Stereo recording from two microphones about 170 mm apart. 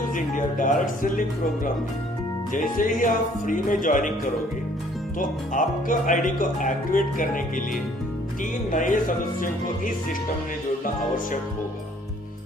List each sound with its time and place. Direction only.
0.1 s speech: 50° left (ahead or behind)
2.5 s speech: 50° left (ahead or behind)
5.5 s speech: 50° left (ahead or behind)